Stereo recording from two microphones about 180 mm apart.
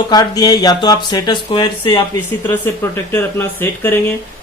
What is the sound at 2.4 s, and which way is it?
Speech, 10° left (ahead or behind).